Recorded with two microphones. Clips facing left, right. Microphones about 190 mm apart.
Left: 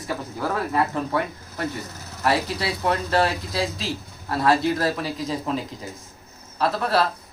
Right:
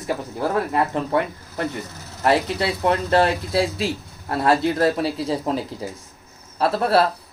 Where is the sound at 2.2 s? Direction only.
25° right (ahead or behind).